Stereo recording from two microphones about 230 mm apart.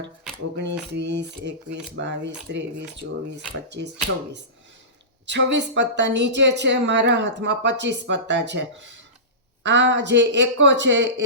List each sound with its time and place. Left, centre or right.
0.5 s speech: right
5.2 s speech: right